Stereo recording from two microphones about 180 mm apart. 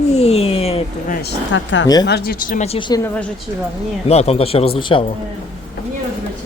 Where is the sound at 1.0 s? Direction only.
50° left (ahead or behind).